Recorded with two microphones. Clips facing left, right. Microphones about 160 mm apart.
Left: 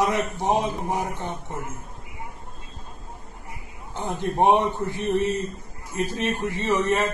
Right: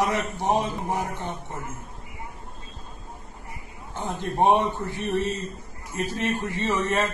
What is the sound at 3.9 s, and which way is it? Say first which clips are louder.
A man's voice: left 2 dB; 15° left (ahead or behind).